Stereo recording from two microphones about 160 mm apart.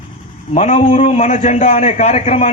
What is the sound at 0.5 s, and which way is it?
A man's voice, 45° left (ahead or behind).